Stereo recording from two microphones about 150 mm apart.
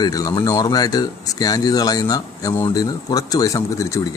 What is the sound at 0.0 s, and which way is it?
Speech, 25° left (ahead or behind).